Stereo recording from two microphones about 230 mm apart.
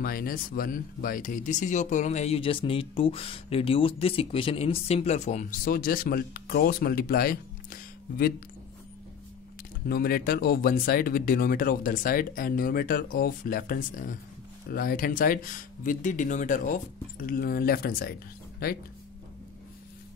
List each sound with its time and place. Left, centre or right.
0.0 s speech: left
9.8 s speech: left